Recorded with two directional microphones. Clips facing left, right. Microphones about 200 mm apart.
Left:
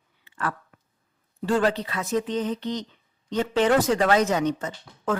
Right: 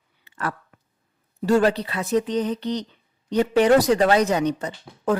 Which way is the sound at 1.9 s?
35° right (ahead or behind).